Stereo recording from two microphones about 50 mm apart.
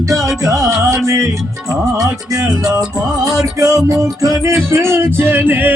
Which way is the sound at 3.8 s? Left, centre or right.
Right.